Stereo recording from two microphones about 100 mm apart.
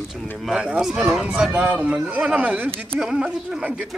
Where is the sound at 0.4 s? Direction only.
5° right (ahead or behind).